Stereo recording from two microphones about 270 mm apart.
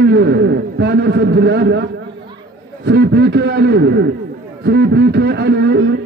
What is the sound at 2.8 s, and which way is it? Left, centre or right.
A man's voice, right.